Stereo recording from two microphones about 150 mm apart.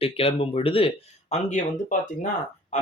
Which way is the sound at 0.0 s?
40° left (ahead or behind).